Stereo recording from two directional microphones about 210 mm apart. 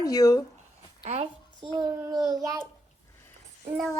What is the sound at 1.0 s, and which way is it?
A child's voice, 25° right (ahead or behind).